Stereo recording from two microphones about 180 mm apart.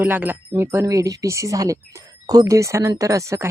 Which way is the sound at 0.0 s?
10° right (ahead or behind).